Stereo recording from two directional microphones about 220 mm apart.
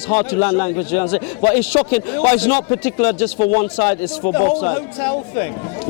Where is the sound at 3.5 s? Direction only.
25° left (ahead or behind).